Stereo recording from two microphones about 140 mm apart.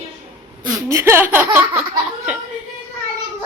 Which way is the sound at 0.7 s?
20° right (ahead or behind).